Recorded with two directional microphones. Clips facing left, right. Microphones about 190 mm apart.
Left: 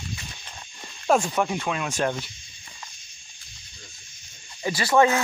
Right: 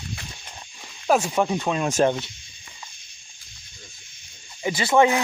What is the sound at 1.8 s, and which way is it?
Speech, 40° right (ahead or behind).